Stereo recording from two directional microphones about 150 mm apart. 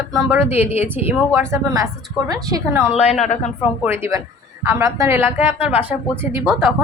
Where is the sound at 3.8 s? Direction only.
15° right (ahead or behind).